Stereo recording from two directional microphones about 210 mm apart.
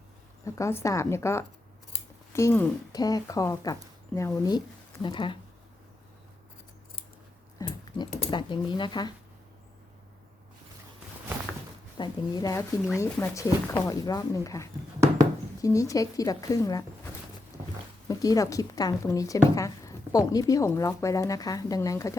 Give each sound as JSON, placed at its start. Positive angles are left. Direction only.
{"t": 0.4, "sound": "speech", "side_deg": 15}
{"t": 7.6, "sound": "a sound", "side_deg": 15}
{"t": 8.1, "sound": "speech", "side_deg": 25}
{"t": 11.9, "sound": "speech", "side_deg": 20}
{"t": 18.1, "sound": "speech", "side_deg": 15}